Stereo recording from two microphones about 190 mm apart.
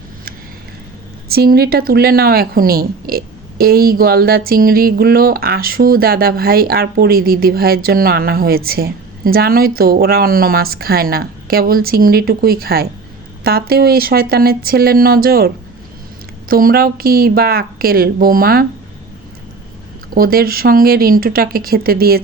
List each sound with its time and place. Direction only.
1.3 s a woman's voice: 55° right (ahead or behind)
16.5 s a woman's voice: 50° right (ahead or behind)
20.1 s a woman's voice: 50° right (ahead or behind)